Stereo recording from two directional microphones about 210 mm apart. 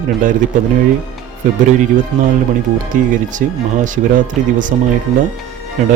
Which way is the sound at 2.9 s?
35° right (ahead or behind).